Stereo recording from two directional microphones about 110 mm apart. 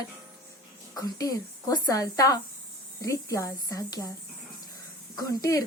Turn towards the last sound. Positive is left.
turn(degrees=35)  # may be behind; listen again after turning